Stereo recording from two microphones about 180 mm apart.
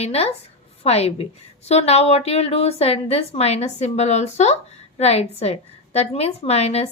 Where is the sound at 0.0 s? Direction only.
35° left (ahead or behind).